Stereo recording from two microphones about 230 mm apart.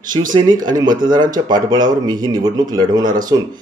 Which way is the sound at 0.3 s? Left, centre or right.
Centre.